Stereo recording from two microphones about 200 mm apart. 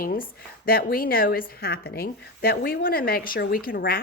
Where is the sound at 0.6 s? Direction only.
45° left (ahead or behind).